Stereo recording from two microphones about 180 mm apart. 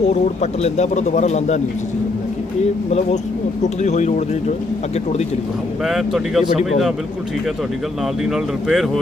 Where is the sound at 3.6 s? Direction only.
40° left (ahead or behind).